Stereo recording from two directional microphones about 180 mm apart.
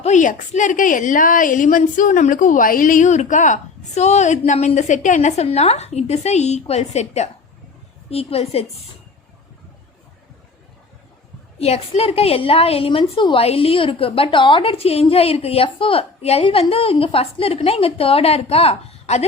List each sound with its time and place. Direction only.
0.0 s a woman's voice: 40° left (ahead or behind)
11.6 s a woman's voice: 35° left (ahead or behind)